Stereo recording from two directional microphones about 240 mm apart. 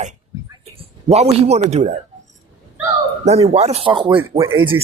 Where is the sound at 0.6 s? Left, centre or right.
Right.